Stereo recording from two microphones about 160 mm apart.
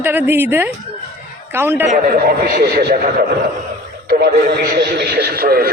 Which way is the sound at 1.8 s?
65° right (ahead or behind).